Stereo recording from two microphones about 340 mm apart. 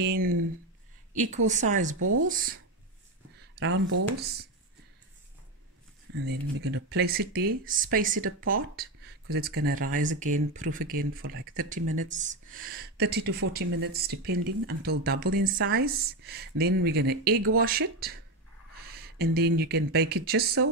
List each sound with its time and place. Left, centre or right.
1.1 s speech: right
2.0 s speech: right
2.2 s speech: right
3.5 s speech: right
6.1 s speech: right